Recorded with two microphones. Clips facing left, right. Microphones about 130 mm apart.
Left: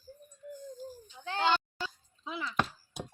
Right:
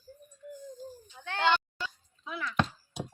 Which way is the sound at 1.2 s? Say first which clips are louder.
Right 2 dB; 35° left (ahead or behind).